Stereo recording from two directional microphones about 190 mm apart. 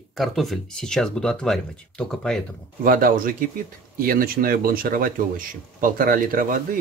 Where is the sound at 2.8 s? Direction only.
50° right (ahead or behind).